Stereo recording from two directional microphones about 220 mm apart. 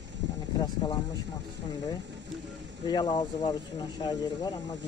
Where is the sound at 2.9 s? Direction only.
20° left (ahead or behind).